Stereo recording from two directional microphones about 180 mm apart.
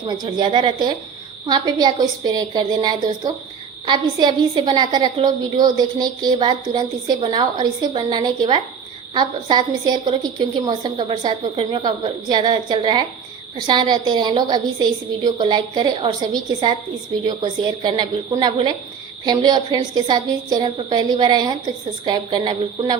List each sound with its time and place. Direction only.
0.0 s a woman's voice: 25° right (ahead or behind)